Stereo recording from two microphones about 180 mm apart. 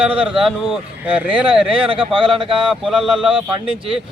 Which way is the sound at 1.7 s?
30° right (ahead or behind).